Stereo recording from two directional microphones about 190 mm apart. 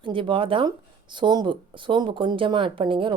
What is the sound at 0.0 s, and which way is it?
Speech, 25° right (ahead or behind).